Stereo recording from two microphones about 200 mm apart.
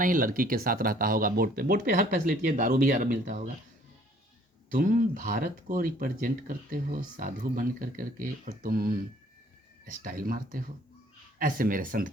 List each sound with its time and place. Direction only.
0.0 s speech: 40° right (ahead or behind)
4.7 s speech: 40° right (ahead or behind)